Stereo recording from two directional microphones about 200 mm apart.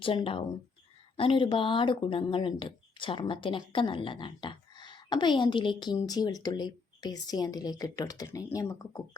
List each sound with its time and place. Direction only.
0.0 s speech: 25° left (ahead or behind)